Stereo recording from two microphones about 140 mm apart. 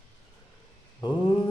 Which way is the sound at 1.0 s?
30° left (ahead or behind).